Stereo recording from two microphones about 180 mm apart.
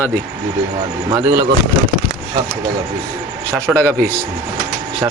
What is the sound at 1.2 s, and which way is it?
Speech, 15° right (ahead or behind).